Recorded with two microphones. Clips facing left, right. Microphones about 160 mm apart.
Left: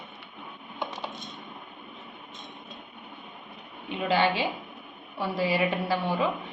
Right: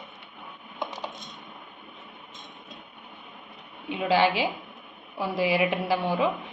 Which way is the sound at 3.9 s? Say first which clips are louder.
Right 2 dB; 10° right (ahead or behind).